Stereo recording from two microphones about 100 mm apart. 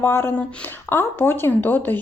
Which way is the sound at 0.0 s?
25° left (ahead or behind).